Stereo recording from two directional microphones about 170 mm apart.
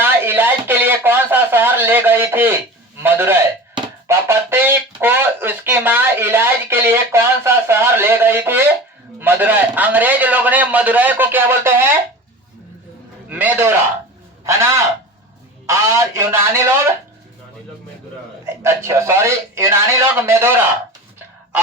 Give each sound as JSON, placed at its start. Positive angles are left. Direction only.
{"t": 0.0, "sound": "a sound", "side_deg": -10}
{"t": 3.0, "sound": "speech", "side_deg": -15}
{"t": 13.3, "sound": "speech", "side_deg": -10}
{"t": 18.4, "sound": "speech", "side_deg": -15}